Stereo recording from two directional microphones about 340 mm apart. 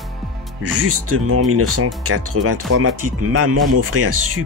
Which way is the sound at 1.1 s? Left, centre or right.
Right.